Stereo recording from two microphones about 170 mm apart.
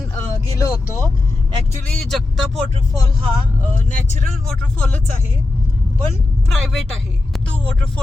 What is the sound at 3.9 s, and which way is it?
Speech, 45° left (ahead or behind).